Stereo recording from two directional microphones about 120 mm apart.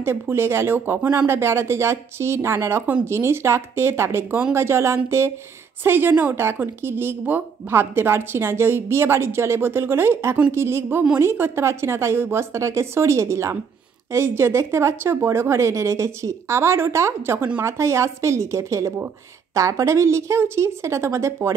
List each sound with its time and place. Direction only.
0.0 s a woman's voice: 20° right (ahead or behind)